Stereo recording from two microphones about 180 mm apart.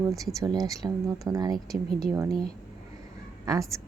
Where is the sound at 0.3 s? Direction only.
20° right (ahead or behind).